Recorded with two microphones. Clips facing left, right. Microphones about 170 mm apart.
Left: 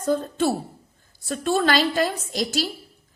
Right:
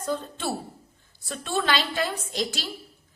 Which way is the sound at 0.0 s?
45° left (ahead or behind).